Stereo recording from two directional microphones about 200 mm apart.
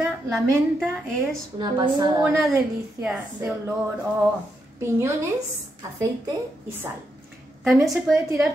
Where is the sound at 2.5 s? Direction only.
10° right (ahead or behind).